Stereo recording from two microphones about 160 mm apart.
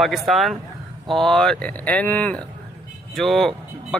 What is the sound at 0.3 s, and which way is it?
Speech, centre (ahead or behind).